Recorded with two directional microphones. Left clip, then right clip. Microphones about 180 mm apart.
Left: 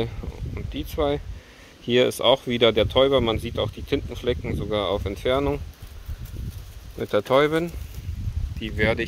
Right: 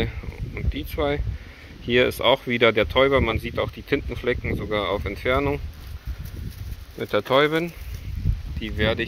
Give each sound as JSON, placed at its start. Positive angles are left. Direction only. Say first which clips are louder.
{"t": 0.0, "sound": "a sound", "louder": "even", "side_deg": 15}
{"t": 1.9, "sound": "speech", "louder": "even", "side_deg": 20}
{"t": 7.0, "sound": "speech", "louder": "even", "side_deg": 15}